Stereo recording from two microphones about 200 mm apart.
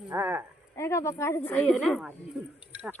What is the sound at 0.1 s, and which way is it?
Speech, 10° right (ahead or behind).